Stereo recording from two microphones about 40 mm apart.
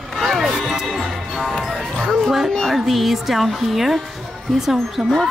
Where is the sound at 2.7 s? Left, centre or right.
Centre.